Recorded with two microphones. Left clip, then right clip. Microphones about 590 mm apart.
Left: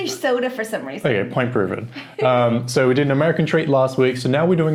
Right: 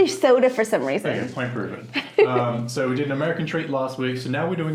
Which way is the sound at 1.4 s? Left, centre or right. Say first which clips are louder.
Left 8 dB; left.